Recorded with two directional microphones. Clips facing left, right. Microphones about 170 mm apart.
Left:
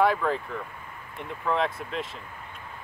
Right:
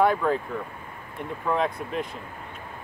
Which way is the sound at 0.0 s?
Centre (ahead or behind).